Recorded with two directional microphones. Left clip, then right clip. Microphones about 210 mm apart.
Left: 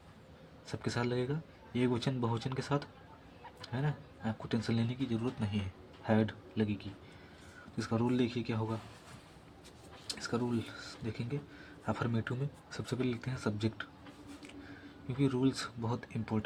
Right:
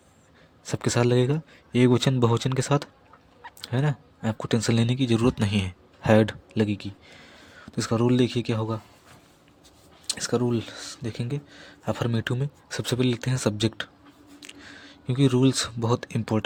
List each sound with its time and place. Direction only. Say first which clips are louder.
0.6 s speech: right 12 dB; 55° right (ahead or behind)
10.1 s speech: right 11 dB; 55° right (ahead or behind)